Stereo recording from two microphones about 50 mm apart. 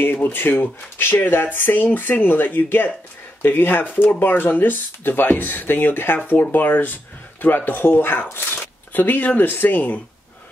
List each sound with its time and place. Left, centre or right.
0.0 s speech: left
8.9 s speech: left